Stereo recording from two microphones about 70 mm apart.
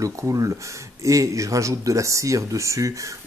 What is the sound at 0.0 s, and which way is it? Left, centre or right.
Speech, right.